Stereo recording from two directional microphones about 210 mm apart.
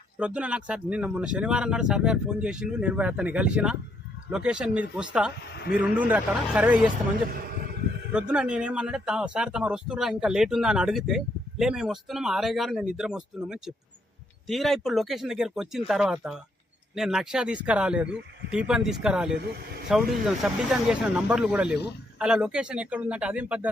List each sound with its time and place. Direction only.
0.2 s speech: 5° right (ahead or behind)
5.5 s a man's voice: 50° left (ahead or behind)
5.8 s speech: 5° right (ahead or behind)
7.3 s a sound: 45° right (ahead or behind)
8.1 s speech: 5° right (ahead or behind)